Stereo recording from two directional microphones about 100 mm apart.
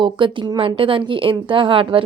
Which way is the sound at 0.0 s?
55° right (ahead or behind).